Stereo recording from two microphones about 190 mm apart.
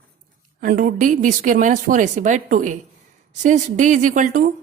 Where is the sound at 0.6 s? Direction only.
45° right (ahead or behind).